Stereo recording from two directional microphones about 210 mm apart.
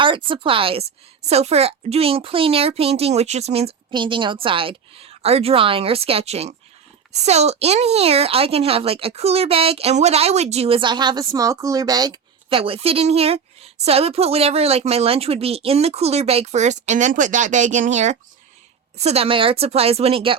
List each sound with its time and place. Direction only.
0.0 s speech: 25° right (ahead or behind)